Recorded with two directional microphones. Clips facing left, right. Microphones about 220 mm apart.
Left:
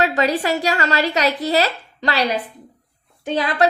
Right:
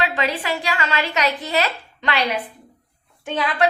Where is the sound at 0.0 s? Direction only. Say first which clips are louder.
Left 5 dB; 40° left (ahead or behind).